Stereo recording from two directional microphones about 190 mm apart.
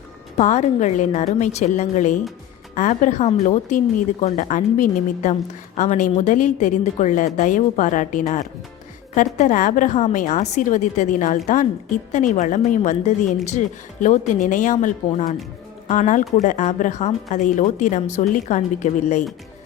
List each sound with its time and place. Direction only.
0.3 s speech: 40° left (ahead or behind)